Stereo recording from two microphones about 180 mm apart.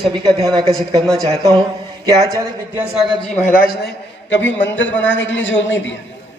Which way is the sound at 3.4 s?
50° left (ahead or behind).